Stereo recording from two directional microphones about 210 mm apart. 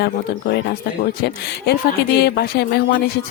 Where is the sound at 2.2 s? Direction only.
50° left (ahead or behind).